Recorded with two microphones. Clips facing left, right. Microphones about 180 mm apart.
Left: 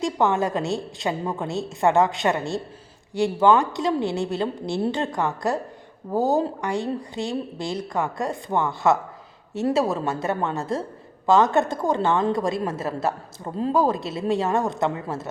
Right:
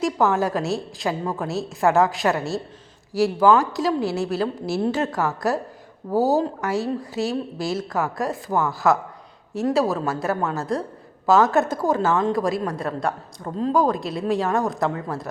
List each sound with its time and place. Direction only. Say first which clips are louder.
0.0 s a woman's voice: right 1 dB; centre (ahead or behind)